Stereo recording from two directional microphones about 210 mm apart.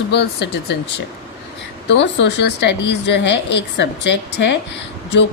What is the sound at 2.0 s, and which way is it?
A woman's voice, 55° left (ahead or behind).